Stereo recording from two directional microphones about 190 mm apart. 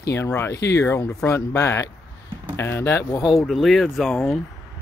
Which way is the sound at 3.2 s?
Centre (ahead or behind).